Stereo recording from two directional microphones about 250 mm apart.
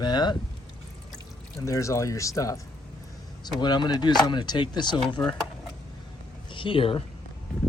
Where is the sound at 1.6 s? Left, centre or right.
Centre.